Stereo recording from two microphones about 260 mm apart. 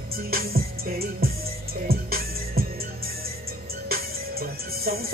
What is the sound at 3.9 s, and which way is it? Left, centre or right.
Music, right.